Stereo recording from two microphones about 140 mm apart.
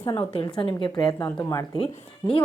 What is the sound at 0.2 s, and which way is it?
A woman's voice, 40° left (ahead or behind).